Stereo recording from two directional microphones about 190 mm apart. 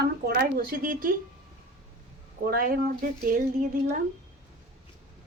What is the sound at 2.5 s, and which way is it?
Speech, 50° right (ahead or behind).